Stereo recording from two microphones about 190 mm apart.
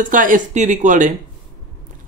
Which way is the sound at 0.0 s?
45° right (ahead or behind).